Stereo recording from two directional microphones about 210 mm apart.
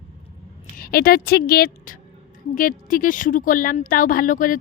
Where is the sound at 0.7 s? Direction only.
45° left (ahead or behind).